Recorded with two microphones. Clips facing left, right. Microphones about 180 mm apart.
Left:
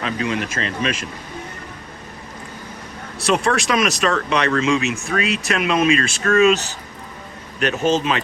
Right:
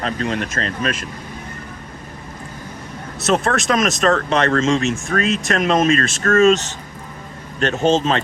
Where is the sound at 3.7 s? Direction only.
45° right (ahead or behind).